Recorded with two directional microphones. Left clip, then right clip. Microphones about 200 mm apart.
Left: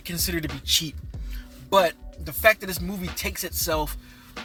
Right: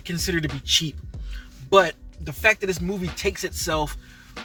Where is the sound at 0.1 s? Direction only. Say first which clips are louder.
Right 3 dB; 20° left (ahead or behind).